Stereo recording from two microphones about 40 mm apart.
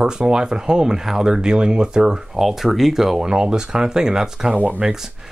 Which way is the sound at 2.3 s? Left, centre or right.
Centre.